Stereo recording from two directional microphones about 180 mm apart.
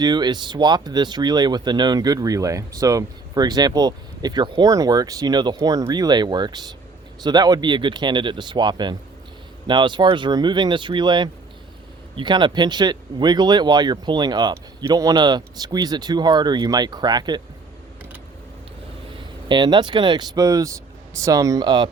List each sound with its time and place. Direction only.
0.0 s speech: 25° right (ahead or behind)
19.5 s speech: 25° right (ahead or behind)